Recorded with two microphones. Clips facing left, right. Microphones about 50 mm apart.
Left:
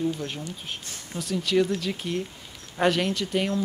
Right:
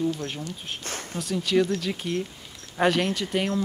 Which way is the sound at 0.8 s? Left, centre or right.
Right.